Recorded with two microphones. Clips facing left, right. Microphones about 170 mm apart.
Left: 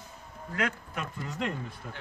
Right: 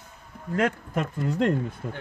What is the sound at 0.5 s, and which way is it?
Speech, 45° right (ahead or behind).